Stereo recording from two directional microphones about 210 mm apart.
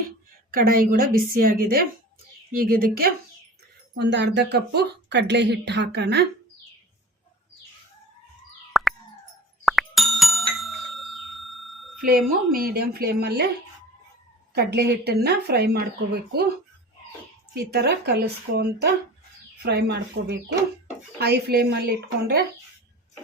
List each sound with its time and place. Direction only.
0.5 s speech: 45° right (ahead or behind)
3.9 s speech: 55° right (ahead or behind)
8.7 s plop: centre (ahead or behind)
9.6 s a sound: centre (ahead or behind)
12.5 s speech: 45° right (ahead or behind)
14.5 s speech: 50° right (ahead or behind)
17.5 s speech: 50° right (ahead or behind)